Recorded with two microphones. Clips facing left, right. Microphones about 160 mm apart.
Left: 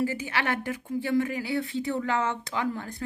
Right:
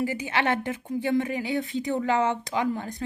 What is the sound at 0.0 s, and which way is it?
A woman's voice, 15° right (ahead or behind).